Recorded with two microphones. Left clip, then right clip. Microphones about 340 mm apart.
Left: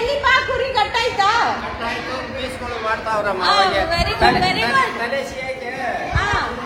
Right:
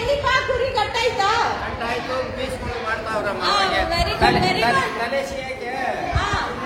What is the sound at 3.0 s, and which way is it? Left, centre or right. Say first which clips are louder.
Speech: left 5 dB; centre.